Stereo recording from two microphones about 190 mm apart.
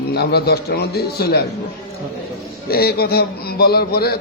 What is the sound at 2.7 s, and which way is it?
A man's voice, 55° left (ahead or behind).